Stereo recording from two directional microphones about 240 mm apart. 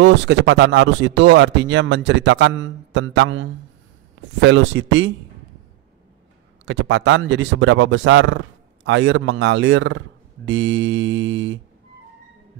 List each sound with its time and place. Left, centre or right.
0.0 s speech: right
6.6 s speech: right